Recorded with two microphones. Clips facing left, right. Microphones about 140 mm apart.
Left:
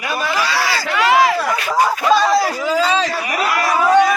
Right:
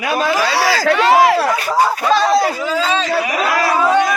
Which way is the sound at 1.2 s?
60° right (ahead or behind).